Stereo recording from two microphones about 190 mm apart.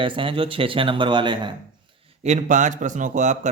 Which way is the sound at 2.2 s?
40° right (ahead or behind).